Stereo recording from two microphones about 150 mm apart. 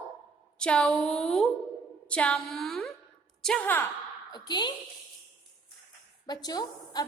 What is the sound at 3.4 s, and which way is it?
Speech, 5° left (ahead or behind).